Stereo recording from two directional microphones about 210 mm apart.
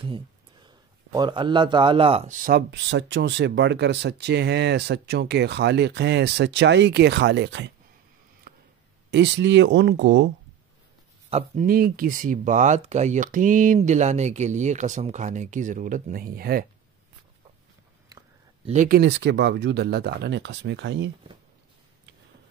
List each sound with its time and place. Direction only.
0.7 s a man's voice: 20° right (ahead or behind); by 7.7 s 55° right (ahead or behind)
9.1 s speech: 60° right (ahead or behind)
11.2 s speech: 30° right (ahead or behind)
11.6 s speech: 45° right (ahead or behind)
18.7 s speech: 35° right (ahead or behind)
18.9 s a man's voice: 55° right (ahead or behind)